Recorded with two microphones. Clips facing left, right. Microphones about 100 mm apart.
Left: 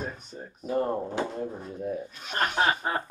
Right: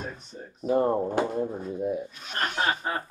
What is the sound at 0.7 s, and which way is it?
Speech, 25° right (ahead or behind).